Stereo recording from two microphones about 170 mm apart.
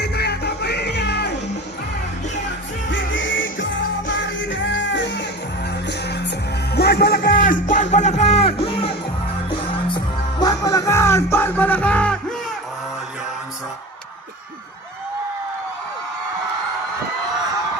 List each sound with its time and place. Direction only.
0.0 s music: 70° left (ahead or behind)
3.1 s music: 90° left
6.7 s speech: 70° left (ahead or behind); by 8.9 s 35° left (ahead or behind)
10.4 s music: 20° left (ahead or behind)